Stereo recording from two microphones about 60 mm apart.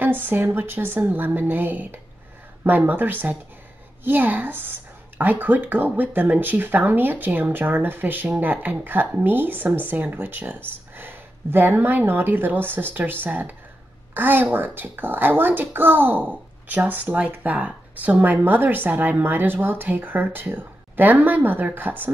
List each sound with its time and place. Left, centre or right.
0.0 s speech: right